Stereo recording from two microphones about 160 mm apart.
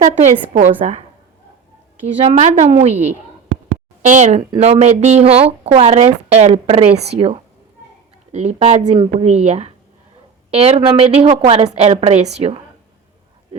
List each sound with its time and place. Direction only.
0.2 s a woman's voice: 45° right (ahead or behind)
2.2 s a woman's voice: 40° right (ahead or behind)